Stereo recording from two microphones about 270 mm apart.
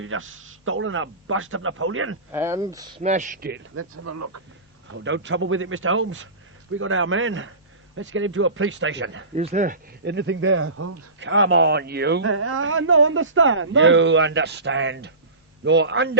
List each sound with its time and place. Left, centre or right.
0.0 s speech: right
2.3 s speech: centre
3.0 s speech: right
3.8 s speech: right
4.9 s speech: right
9.3 s speech: right
12.3 s speech: right